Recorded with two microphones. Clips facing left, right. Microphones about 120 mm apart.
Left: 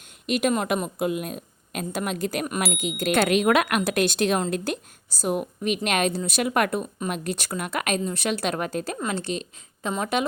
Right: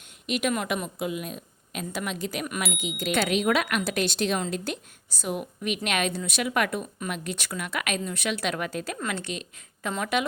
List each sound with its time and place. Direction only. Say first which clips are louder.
0.3 s a woman's voice: left 4 dB; 40° left (ahead or behind)